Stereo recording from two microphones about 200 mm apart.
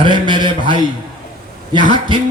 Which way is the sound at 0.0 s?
25° right (ahead or behind).